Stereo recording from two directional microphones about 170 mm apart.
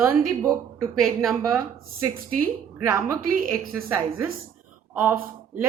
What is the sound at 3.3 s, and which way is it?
Speech, 60° right (ahead or behind).